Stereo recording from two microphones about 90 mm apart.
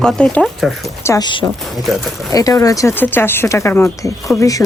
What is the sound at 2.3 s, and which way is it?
Speech, 40° left (ahead or behind).